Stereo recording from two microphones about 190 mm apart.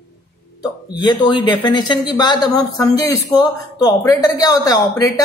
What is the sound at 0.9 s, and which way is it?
Speech, 25° left (ahead or behind).